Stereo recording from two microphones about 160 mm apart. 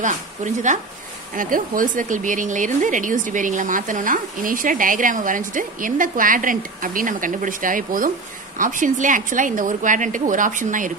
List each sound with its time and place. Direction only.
0.0 s a woman's voice: 50° right (ahead or behind)